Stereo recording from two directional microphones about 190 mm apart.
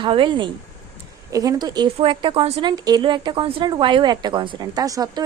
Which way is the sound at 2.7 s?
20° right (ahead or behind).